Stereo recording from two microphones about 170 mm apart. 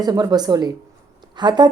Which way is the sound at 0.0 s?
25° right (ahead or behind).